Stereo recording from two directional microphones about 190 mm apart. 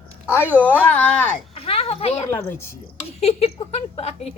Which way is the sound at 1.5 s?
30° left (ahead or behind).